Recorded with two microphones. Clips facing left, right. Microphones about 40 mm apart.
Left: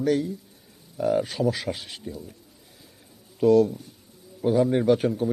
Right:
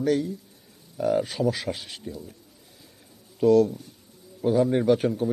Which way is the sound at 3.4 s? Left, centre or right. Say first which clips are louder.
Even; centre.